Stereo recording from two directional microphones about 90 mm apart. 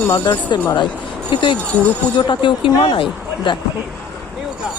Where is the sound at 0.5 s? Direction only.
55° left (ahead or behind).